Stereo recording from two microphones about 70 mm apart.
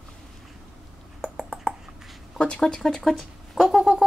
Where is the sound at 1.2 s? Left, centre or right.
Centre.